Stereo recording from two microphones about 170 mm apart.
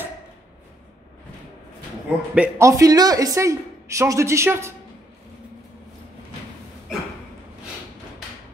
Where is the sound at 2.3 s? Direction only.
10° right (ahead or behind).